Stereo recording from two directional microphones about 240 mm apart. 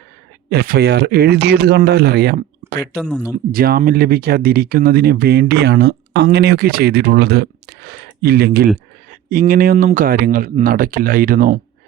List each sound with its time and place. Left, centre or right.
0.5 s speech: right
3.0 s speech: centre
3.5 s speech: right